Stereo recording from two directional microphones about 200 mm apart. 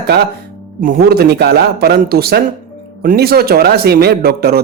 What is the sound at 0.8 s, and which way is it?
Speech, 45° right (ahead or behind).